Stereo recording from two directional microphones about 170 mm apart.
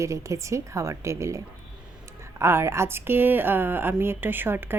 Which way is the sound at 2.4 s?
15° right (ahead or behind).